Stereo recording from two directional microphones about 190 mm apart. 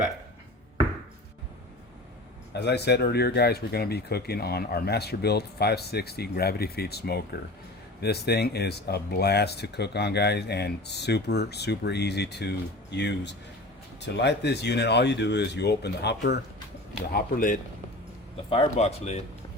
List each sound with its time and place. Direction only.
2.5 s speech: 60° left (ahead or behind)
17.1 s speech: 50° left (ahead or behind)
18.5 s speech: 30° left (ahead or behind)